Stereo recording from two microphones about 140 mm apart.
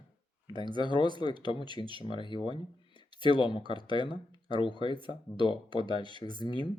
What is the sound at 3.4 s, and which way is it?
Speech, 35° left (ahead or behind).